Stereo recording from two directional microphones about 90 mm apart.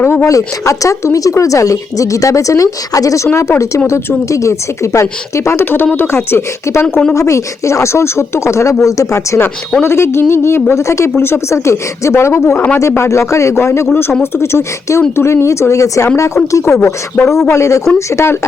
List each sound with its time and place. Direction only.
0.0 s a sound: 25° left (ahead or behind)
0.3 s speech: 35° left (ahead or behind)
17.2 s speech: 20° left (ahead or behind)
17.5 s speech: 35° left (ahead or behind)